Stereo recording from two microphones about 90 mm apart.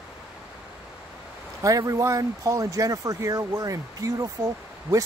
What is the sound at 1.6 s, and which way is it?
Speech, 40° right (ahead or behind).